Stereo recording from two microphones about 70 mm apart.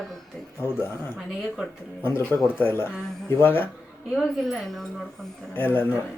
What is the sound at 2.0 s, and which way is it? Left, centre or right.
Speech, left.